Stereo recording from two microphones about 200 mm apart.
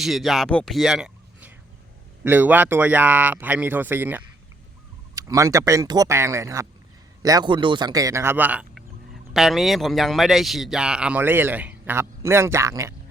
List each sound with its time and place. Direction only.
0.0 s speech: centre (ahead or behind)